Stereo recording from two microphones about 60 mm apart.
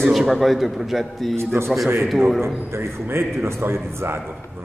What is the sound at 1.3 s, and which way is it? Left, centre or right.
Speech, right.